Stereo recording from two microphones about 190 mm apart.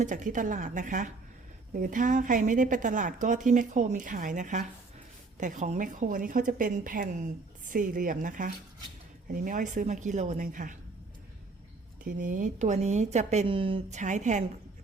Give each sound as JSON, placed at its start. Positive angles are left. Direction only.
{"t": 0.0, "sound": "a woman's voice", "side_deg": -40}
{"t": 12.0, "sound": "a woman's voice", "side_deg": -45}